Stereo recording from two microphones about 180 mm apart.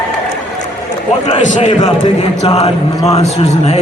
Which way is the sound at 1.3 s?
40° left (ahead or behind).